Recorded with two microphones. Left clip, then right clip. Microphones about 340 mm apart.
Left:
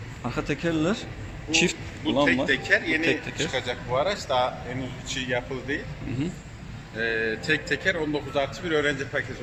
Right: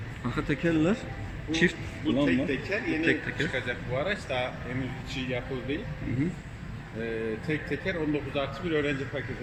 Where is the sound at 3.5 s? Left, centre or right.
Left.